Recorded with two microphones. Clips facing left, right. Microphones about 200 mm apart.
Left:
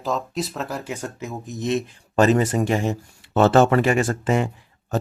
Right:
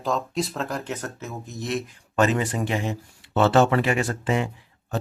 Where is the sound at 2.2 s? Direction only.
40° left (ahead or behind).